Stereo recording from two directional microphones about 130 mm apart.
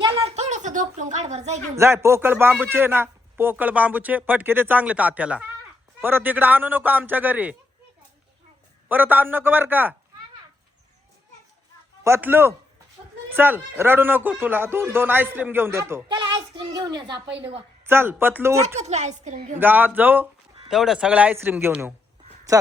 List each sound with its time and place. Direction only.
0.0 s a sound: 40° right (ahead or behind)
0.3 s speech: 60° right (ahead or behind)
1.7 s speech: 20° right (ahead or behind)
8.9 s speech: 15° right (ahead or behind)
12.0 s a man's voice: 15° right (ahead or behind)
16.0 s child singing: 40° right (ahead or behind)
16.7 s a child's voice: 30° right (ahead or behind)
17.8 s speech: 15° right (ahead or behind)
18.8 s a woman's voice: 60° right (ahead or behind)
19.5 s speech: 15° right (ahead or behind)
20.7 s speech: 5° right (ahead or behind)